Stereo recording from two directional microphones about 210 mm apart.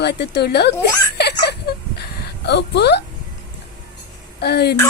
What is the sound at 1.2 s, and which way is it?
Giggle, 50° left (ahead or behind).